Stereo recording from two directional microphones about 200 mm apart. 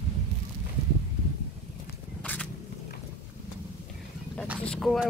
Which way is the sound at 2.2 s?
5° left (ahead or behind).